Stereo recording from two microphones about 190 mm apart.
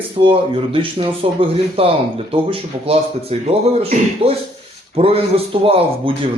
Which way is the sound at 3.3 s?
30° right (ahead or behind).